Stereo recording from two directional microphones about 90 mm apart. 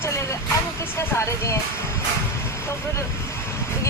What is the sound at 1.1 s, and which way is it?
Speech, 30° left (ahead or behind).